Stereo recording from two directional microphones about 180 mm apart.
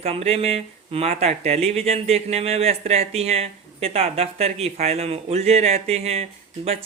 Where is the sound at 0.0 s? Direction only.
35° right (ahead or behind).